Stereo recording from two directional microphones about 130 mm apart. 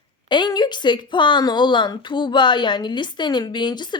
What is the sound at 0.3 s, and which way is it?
A woman's voice, 35° left (ahead or behind).